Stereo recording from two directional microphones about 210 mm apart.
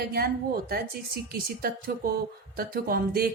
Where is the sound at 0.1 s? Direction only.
45° right (ahead or behind).